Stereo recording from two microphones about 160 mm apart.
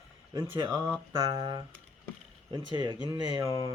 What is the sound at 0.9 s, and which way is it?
Speech, 20° right (ahead or behind).